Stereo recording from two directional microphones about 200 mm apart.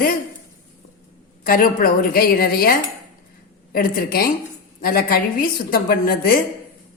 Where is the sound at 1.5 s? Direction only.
45° left (ahead or behind).